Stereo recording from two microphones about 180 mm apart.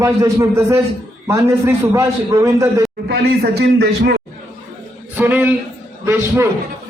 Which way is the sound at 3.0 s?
65° right (ahead or behind).